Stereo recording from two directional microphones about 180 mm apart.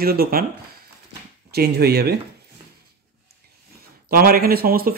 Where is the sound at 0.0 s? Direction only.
55° right (ahead or behind).